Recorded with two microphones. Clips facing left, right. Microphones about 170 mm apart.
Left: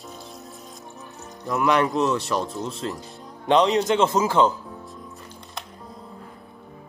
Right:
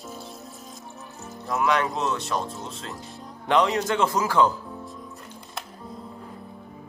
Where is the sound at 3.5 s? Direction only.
20° left (ahead or behind).